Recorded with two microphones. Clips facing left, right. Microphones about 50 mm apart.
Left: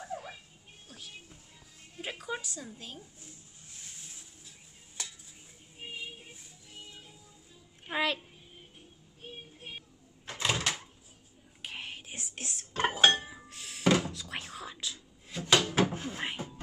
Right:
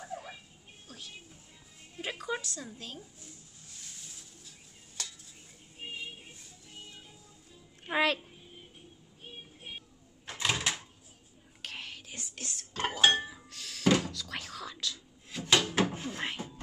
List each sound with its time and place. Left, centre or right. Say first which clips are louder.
0.1 s music: left 1 dB; centre
3.7 s stir: even; centre
5.9 s music: even; centre
7.8 s a sound: right 3 dB; centre
10.4 s a sound: even; centre
11.6 s whispering: left 1 dB; left
13.2 s thunk: right 3 dB; centre
15.5 s drawer open or close: left 1 dB; centre
15.9 s a sound: even; centre